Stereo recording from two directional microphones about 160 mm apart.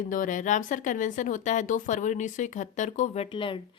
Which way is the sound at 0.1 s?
55° left (ahead or behind).